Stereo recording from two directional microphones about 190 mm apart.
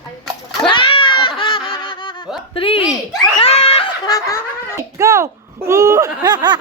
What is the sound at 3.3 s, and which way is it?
Snicker, 30° left (ahead or behind).